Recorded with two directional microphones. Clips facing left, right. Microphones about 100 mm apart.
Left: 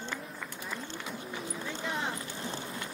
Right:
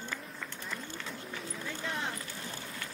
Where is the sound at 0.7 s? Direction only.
15° left (ahead or behind).